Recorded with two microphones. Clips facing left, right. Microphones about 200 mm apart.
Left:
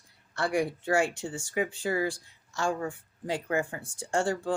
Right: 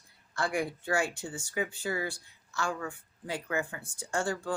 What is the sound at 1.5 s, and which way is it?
Speech, 30° left (ahead or behind).